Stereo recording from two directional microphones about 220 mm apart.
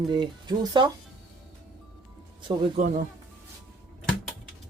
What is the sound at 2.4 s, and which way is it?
Speech, 35° right (ahead or behind).